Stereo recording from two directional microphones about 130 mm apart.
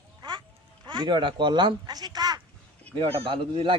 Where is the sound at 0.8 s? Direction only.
35° right (ahead or behind).